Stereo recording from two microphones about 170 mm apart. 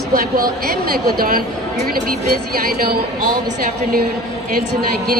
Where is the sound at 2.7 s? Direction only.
65° right (ahead or behind).